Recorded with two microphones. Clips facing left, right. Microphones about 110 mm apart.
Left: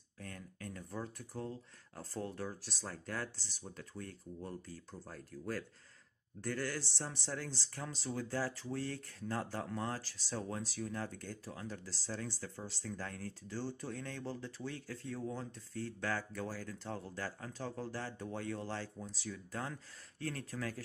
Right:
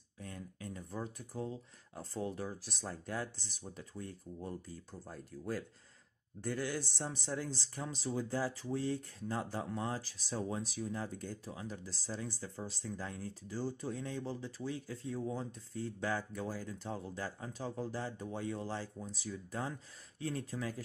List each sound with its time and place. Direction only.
0.2 s speech: 20° right (ahead or behind)